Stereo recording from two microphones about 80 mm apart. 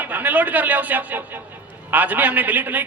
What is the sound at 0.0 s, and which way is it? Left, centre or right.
A man's voice, right.